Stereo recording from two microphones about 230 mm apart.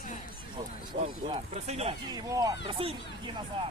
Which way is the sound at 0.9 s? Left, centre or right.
Right.